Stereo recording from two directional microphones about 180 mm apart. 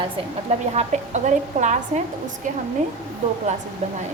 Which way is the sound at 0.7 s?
40° right (ahead or behind).